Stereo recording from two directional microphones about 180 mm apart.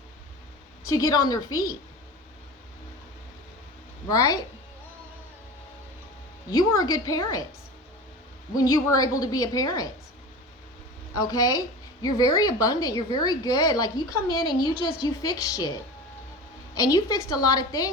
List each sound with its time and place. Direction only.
0.9 s a woman's voice: 20° left (ahead or behind)
4.1 s a woman's voice: 20° left (ahead or behind)
6.5 s a woman's voice: 20° left (ahead or behind)
8.5 s a woman's voice: 20° left (ahead or behind)
11.2 s a woman's voice: 20° left (ahead or behind)
16.7 s a woman's voice: 20° left (ahead or behind)